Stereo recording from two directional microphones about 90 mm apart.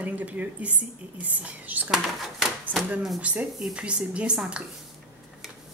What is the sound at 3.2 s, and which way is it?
Speech, 15° right (ahead or behind).